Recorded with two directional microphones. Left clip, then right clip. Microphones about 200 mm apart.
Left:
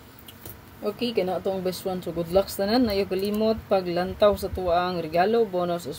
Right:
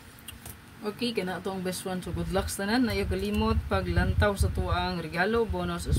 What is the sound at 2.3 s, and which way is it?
Speech, 25° right (ahead or behind).